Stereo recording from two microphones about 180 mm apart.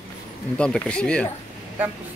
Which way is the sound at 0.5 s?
5° left (ahead or behind).